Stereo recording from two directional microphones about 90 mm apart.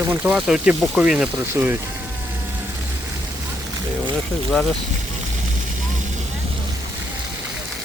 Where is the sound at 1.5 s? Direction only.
25° right (ahead or behind).